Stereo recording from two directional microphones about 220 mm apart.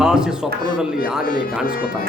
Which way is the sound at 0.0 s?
5° right (ahead or behind).